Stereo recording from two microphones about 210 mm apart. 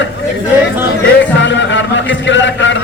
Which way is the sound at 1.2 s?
60° left (ahead or behind).